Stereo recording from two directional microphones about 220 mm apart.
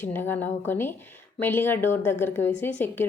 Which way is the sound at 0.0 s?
10° left (ahead or behind).